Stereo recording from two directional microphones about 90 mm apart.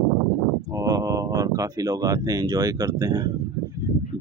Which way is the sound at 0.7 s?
40° right (ahead or behind).